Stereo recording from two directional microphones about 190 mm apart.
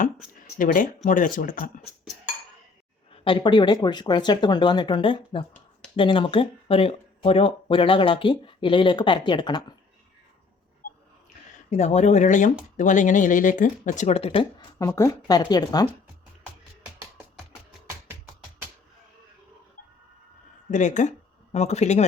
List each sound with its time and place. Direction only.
0.4 s speech: 45° left (ahead or behind)
3.2 s speech: 25° left (ahead or behind)
11.7 s speech: 35° left (ahead or behind)
14.8 s speech: 15° left (ahead or behind)
20.7 s speech: 40° left (ahead or behind)